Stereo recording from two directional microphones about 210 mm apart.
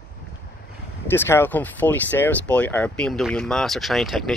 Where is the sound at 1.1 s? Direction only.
10° left (ahead or behind).